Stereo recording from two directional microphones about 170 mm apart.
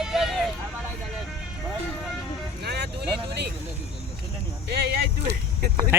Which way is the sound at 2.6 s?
75° right (ahead or behind).